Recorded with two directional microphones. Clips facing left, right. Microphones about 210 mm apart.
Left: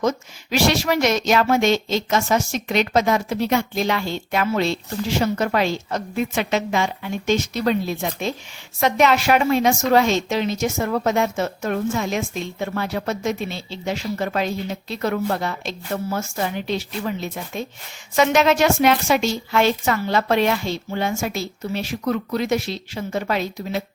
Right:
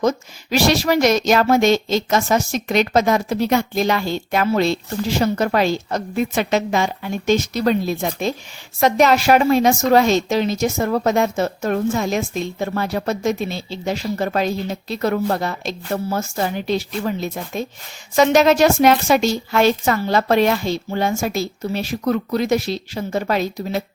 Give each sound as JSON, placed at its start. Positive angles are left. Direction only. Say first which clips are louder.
{"t": 0.5, "sound": "a woman's voice", "louder": "right 3 dB", "side_deg": -40}